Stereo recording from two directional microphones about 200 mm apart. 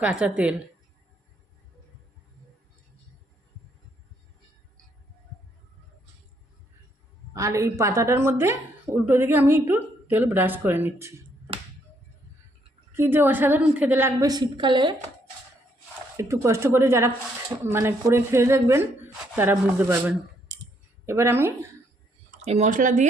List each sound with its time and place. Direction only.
0.0 s a woman's voice: 5° right (ahead or behind)
7.3 s speech: 15° right (ahead or behind)
12.9 s speech: 10° right (ahead or behind)
16.1 s speech: 15° right (ahead or behind)
22.4 s speech: 30° right (ahead or behind)